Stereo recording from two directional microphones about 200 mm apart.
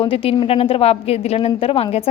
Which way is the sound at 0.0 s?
30° left (ahead or behind).